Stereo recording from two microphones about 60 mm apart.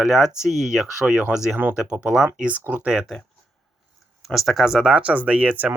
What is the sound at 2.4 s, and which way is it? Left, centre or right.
Speech, right.